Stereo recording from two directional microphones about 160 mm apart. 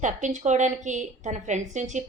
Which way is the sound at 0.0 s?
50° right (ahead or behind).